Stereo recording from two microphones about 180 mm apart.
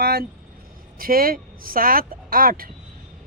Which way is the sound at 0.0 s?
60° right (ahead or behind).